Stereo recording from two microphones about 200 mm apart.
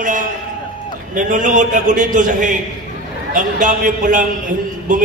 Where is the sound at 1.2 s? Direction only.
40° right (ahead or behind).